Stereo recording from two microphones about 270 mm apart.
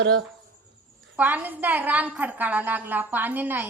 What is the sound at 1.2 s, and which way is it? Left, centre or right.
A woman's voice, centre.